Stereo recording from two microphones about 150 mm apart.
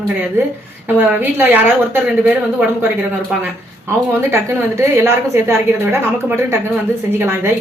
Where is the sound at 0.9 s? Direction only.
15° right (ahead or behind).